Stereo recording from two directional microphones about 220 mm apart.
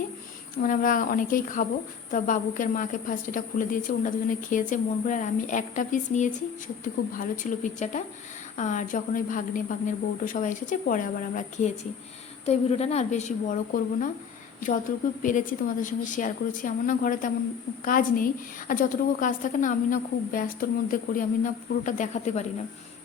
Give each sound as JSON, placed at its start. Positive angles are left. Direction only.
{"t": 0.6, "sound": "a woman's voice", "side_deg": 35}
{"t": 15.2, "sound": "a woman's voice", "side_deg": 35}